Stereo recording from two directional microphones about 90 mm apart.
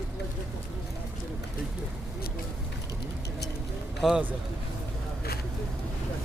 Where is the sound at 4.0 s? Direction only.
5° right (ahead or behind).